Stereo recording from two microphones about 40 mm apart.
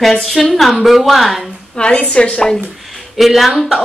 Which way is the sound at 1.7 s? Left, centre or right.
Left.